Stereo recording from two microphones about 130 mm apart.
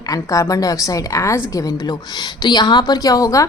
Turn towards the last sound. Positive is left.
turn(degrees=25)  # may be behind; listen again after turning